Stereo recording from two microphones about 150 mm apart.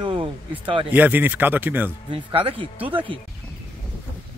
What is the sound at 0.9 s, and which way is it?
Speech, 10° right (ahead or behind).